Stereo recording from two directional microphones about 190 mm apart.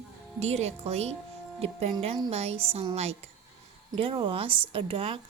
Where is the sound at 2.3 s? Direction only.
35° right (ahead or behind).